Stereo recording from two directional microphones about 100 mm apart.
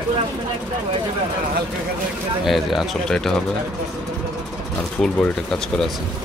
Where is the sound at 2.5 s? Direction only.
Centre (ahead or behind).